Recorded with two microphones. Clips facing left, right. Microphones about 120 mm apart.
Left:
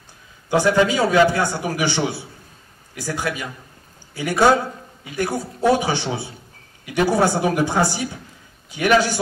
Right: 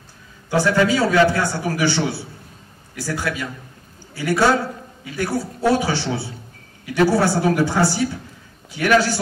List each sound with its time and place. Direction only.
0.5 s a man's voice: 15° left (ahead or behind)